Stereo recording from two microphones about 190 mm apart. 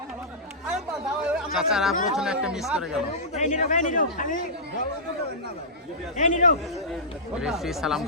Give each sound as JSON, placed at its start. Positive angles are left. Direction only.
{"t": 1.2, "sound": "a sound", "side_deg": -5}
{"t": 1.5, "sound": "speech", "side_deg": 0}
{"t": 3.3, "sound": "speech", "side_deg": 40}
{"t": 6.1, "sound": "speech", "side_deg": 40}
{"t": 7.4, "sound": "speech", "side_deg": 0}